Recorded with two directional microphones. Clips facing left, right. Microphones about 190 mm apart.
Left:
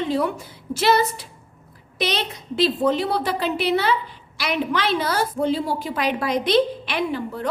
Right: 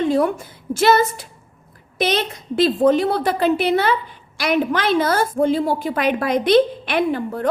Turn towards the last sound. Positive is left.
turn(degrees=-50)  # may be behind; listen again after turning